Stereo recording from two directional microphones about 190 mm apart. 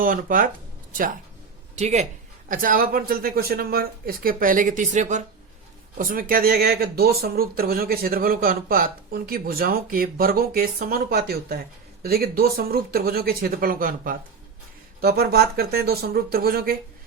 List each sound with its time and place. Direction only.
0.0 s speech: 45° right (ahead or behind)
1.7 s speech: 35° right (ahead or behind)
2.5 s speech: 45° right (ahead or behind)
6.0 s speech: 50° right (ahead or behind)